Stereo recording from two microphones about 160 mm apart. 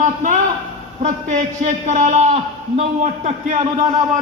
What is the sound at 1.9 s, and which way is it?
A man's voice, 55° right (ahead or behind).